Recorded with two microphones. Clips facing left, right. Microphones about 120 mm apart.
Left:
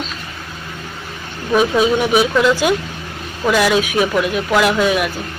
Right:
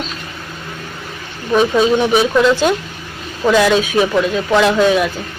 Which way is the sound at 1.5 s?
10° left (ahead or behind).